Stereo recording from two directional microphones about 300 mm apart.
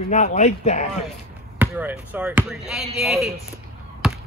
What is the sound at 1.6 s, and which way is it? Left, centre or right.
Speech, centre.